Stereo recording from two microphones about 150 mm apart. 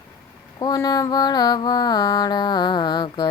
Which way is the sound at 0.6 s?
25° left (ahead or behind).